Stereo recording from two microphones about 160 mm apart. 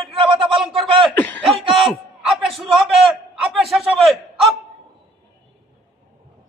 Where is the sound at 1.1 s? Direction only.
10° left (ahead or behind).